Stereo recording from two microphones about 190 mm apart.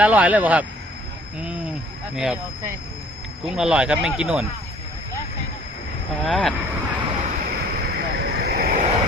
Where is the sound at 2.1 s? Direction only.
Centre (ahead or behind).